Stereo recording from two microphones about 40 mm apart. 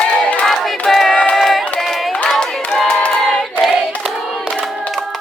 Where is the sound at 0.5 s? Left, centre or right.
Centre.